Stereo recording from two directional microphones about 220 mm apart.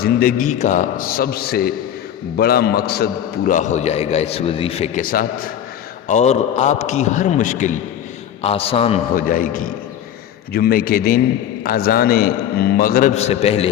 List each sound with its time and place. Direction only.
0.0 s a man's voice: 45° left (ahead or behind); by 9.0 s 25° left (ahead or behind)
9.1 s a man's voice: 40° left (ahead or behind)